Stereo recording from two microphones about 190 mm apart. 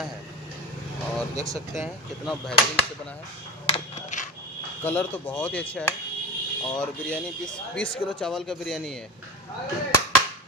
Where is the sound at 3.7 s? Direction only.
40° left (ahead or behind).